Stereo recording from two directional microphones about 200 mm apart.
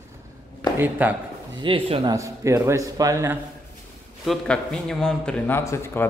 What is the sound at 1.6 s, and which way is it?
Speech, 25° right (ahead or behind).